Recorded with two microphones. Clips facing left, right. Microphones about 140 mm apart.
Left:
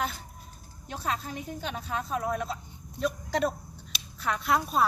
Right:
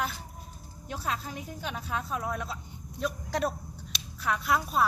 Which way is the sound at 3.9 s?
5° right (ahead or behind).